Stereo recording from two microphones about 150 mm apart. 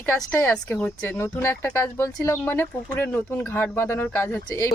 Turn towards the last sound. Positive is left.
turn(degrees=15)  # may be behind; listen again after turning